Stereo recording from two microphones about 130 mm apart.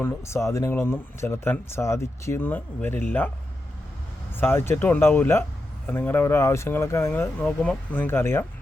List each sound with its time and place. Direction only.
0.0 s speech: 20° left (ahead or behind)
4.4 s speech: 15° left (ahead or behind)